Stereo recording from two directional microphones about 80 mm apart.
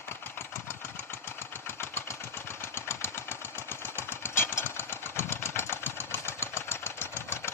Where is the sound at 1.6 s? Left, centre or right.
Left.